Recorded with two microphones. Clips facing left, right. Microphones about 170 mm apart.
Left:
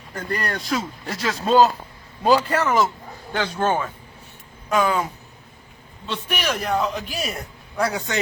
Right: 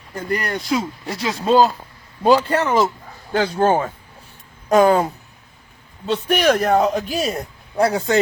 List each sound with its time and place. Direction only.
0.1 s speech: 15° right (ahead or behind)
2.2 s a man's voice: 25° right (ahead or behind)